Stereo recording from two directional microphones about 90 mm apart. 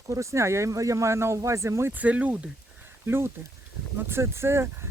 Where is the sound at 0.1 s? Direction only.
35° right (ahead or behind).